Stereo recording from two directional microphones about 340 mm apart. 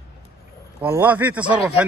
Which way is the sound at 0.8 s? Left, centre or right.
Centre.